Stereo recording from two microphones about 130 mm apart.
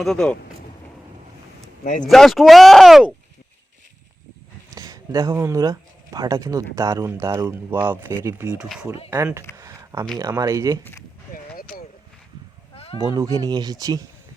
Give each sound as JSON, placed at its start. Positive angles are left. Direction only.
{"t": 0.0, "sound": "speech", "side_deg": 5}
{"t": 1.8, "sound": "speech", "side_deg": 85}
{"t": 2.0, "sound": "speech", "side_deg": 0}
{"t": 4.7, "sound": "a sound", "side_deg": -30}
{"t": 5.3, "sound": "speech", "side_deg": -15}
{"t": 8.5, "sound": "speech", "side_deg": -5}
{"t": 9.0, "sound": "a sound", "side_deg": -20}
{"t": 10.2, "sound": "speech", "side_deg": -25}
{"t": 12.7, "sound": "a sound", "side_deg": 50}
{"t": 13.0, "sound": "speech", "side_deg": -30}